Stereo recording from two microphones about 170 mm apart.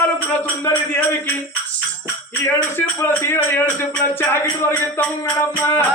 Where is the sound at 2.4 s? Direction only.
15° left (ahead or behind).